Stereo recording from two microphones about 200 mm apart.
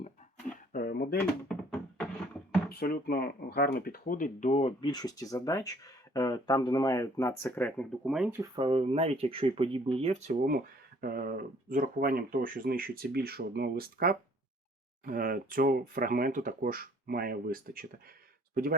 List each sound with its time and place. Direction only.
0.7 s drawer open or close: 50° left (ahead or behind)
2.6 s speech: 50° left (ahead or behind); by 8.4 s 5° right (ahead or behind)
8.4 s speech: 25° right (ahead or behind)
10.4 s speech: 45° right (ahead or behind)